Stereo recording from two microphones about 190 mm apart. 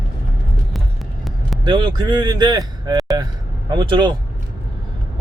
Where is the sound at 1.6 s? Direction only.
20° right (ahead or behind).